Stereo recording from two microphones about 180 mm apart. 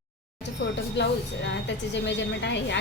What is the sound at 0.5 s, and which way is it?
Speech, 80° left.